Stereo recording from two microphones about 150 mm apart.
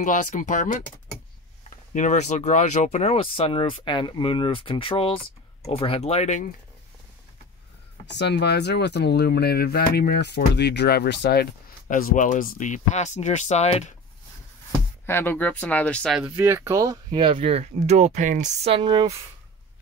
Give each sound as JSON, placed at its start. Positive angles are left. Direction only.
{"t": 0.0, "sound": "speech", "side_deg": 55}
{"t": 2.0, "sound": "speech", "side_deg": 55}
{"t": 8.5, "sound": "speech", "side_deg": 90}
{"t": 11.9, "sound": "speech", "side_deg": 65}
{"t": 15.0, "sound": "speech", "side_deg": 15}
{"t": 16.2, "sound": "speech", "side_deg": -15}
{"t": 17.2, "sound": "speech", "side_deg": -35}
{"t": 18.8, "sound": "speech", "side_deg": -30}